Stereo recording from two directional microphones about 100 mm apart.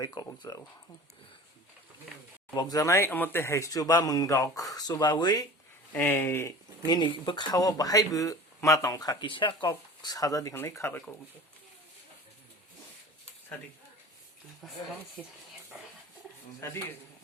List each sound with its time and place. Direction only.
0.0 s speech: 40° left (ahead or behind)
2.6 s speech: 40° left (ahead or behind)
5.9 s speech: 20° left (ahead or behind)
6.8 s speech: 45° left (ahead or behind)
7.5 s speech: 35° left (ahead or behind)
9.2 s speech: 55° left (ahead or behind)
9.6 s speech: 40° left (ahead or behind)
10.5 s speech: 25° left (ahead or behind)
14.6 s speech: centre (ahead or behind)
16.6 s speech: 25° left (ahead or behind)